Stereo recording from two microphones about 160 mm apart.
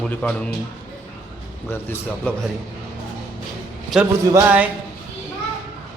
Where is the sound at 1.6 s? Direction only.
15° left (ahead or behind).